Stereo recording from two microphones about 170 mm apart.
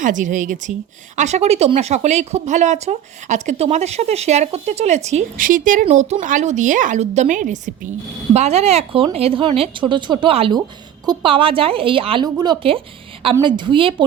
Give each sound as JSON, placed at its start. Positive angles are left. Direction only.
{"t": 0.0, "sound": "a woman's voice", "side_deg": -50}